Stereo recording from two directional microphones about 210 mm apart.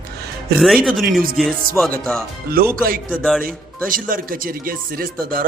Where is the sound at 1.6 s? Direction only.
45° right (ahead or behind).